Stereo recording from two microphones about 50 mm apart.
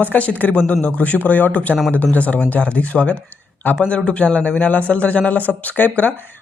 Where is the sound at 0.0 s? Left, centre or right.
Left.